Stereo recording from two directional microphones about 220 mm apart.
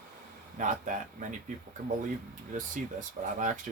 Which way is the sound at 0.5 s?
35° right (ahead or behind).